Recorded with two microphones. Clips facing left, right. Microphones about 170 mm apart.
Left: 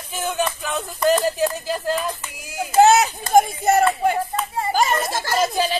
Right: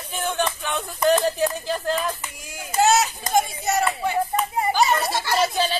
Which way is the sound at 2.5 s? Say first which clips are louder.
Left 5 dB; 55° left (ahead or behind).